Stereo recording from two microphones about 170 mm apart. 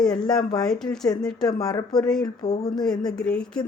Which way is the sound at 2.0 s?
5° left (ahead or behind).